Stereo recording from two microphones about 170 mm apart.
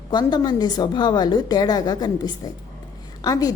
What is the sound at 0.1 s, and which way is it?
A woman's voice, 25° left (ahead or behind).